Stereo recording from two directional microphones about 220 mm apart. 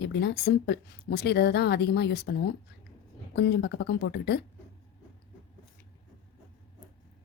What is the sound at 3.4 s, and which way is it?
A woman's voice, 50° left (ahead or behind).